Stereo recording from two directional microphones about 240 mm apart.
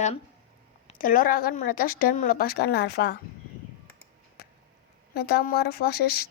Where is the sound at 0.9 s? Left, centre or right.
Left.